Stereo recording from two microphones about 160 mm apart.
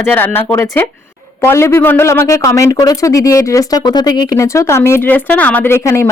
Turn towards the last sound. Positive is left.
turn(degrees=15)  # may be behind; listen again after turning